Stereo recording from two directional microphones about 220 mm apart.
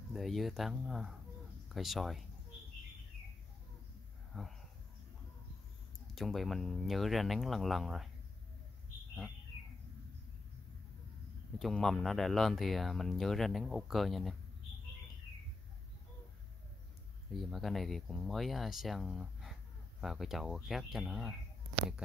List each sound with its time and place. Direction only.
0.1 s speech: centre (ahead or behind)
4.3 s a sound: centre (ahead or behind)
6.1 s speech: centre (ahead or behind)
11.5 s speech: centre (ahead or behind)
17.4 s speech: centre (ahead or behind)